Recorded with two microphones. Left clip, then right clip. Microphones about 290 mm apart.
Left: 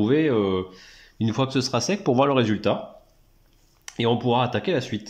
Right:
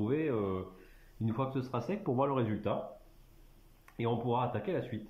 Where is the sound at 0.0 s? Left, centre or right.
Left.